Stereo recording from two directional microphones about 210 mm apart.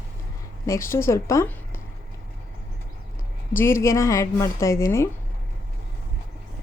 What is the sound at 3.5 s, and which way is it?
A woman's voice, 10° left (ahead or behind).